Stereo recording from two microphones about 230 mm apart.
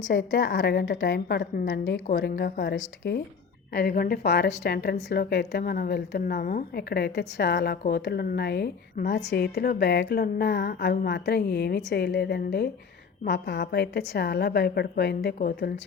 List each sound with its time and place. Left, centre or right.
0.1 s a woman's voice: left